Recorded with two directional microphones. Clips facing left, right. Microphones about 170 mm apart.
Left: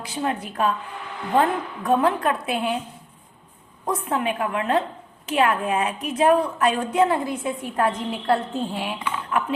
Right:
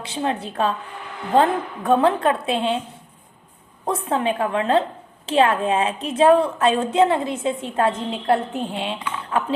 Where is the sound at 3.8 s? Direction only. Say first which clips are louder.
Right 2 dB; 30° right (ahead or behind).